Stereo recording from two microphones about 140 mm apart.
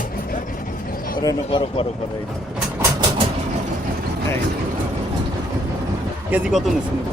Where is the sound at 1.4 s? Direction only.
40° left (ahead or behind).